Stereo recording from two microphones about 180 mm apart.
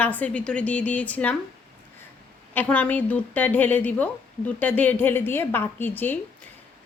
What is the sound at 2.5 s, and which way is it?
A woman's voice, 10° left (ahead or behind).